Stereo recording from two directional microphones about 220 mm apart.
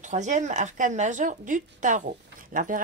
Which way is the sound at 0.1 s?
35° right (ahead or behind).